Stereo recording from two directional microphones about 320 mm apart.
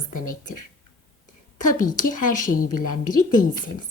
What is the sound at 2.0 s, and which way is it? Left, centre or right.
Speech, left.